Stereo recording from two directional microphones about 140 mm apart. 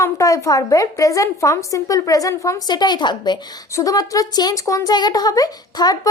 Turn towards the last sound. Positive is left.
turn(degrees=25)  # may be behind; listen again after turning